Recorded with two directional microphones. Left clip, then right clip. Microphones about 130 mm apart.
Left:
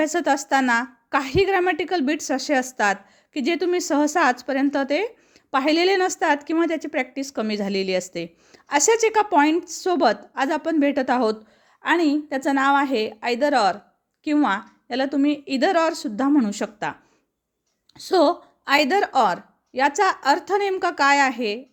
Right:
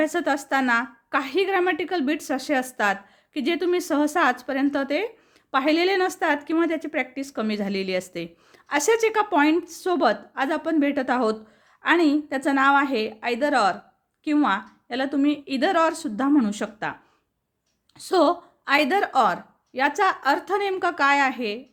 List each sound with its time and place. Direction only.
0.0 s a woman's voice: 35° left (ahead or behind)
11.8 s a woman's voice: 20° left (ahead or behind); by 21.6 s 40° left (ahead or behind)